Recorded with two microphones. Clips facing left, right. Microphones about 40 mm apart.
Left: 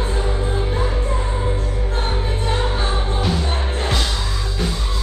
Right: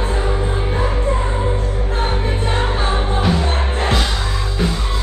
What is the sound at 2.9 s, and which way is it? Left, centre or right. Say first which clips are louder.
Music: right 4 dB; right.